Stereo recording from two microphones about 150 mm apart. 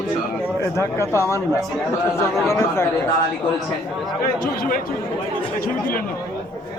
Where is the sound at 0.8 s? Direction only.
15° left (ahead or behind).